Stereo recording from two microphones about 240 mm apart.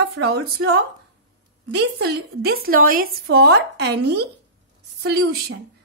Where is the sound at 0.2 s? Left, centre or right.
Right.